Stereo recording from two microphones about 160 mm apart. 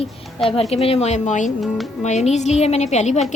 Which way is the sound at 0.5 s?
40° left (ahead or behind).